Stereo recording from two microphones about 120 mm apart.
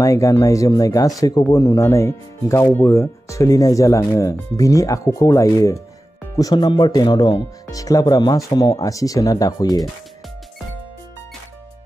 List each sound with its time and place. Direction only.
0.0 s speech: 25° left (ahead or behind)